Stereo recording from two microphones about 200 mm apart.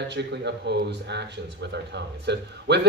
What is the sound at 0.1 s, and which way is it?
Speech, 60° right (ahead or behind).